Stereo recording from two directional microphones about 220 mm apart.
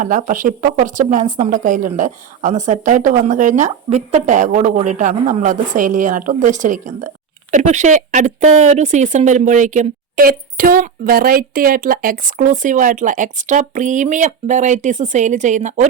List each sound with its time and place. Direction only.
0.0 s speech: 35° right (ahead or behind)